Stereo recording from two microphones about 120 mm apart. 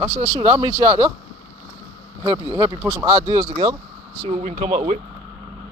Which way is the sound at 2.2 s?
35° right (ahead or behind).